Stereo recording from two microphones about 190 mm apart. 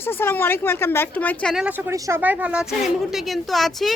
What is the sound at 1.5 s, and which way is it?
A woman's voice, 5° right (ahead or behind).